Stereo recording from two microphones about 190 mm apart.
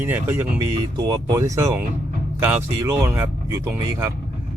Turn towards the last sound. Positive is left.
turn(degrees=-15)  # may be behind; listen again after turning